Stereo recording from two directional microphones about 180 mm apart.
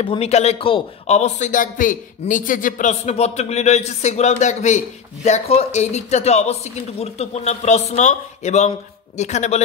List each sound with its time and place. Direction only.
0.0 s a man's voice: 30° left (ahead or behind)